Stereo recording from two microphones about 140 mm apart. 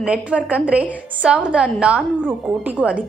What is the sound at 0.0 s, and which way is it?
A woman's voice, 10° right (ahead or behind).